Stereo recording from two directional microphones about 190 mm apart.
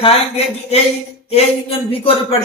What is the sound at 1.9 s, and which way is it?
Speech, 30° left (ahead or behind).